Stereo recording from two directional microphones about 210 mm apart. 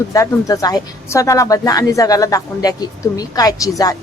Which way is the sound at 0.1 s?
15° left (ahead or behind).